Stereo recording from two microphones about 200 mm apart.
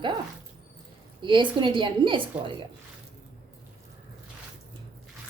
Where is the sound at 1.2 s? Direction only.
25° right (ahead or behind).